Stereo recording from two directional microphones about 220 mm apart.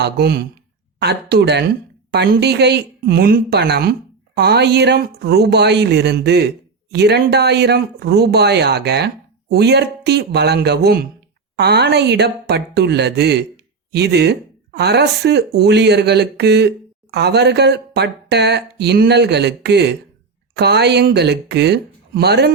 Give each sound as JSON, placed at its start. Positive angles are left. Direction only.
{"t": 0.0, "sound": "speech", "side_deg": -45}